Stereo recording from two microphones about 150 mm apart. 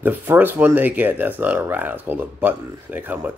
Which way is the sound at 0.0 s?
15° right (ahead or behind).